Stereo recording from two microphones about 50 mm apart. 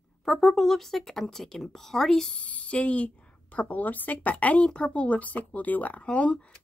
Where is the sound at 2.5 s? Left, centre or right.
Left.